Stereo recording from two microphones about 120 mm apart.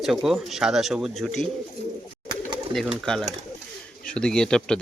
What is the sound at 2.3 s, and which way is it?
Bird, 40° right (ahead or behind).